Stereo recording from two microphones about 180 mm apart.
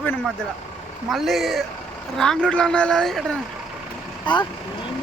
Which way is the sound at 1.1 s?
Centre (ahead or behind).